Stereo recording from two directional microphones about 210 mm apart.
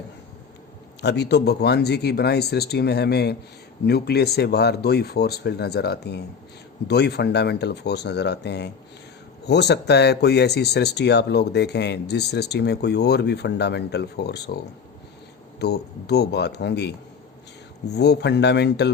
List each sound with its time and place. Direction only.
1.0 s speech: 55° left (ahead or behind)